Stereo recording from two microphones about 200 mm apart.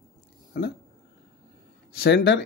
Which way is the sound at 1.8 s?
50° left (ahead or behind).